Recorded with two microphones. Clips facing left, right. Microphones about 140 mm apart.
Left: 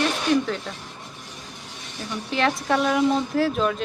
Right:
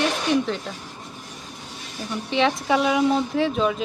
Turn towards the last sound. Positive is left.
turn(degrees=0)  # may be behind; listen again after turning